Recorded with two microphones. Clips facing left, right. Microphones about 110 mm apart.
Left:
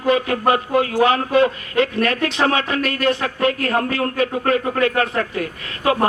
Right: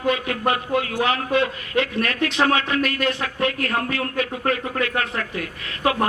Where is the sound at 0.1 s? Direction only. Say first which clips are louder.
Left 6 dB; 35° left (ahead or behind).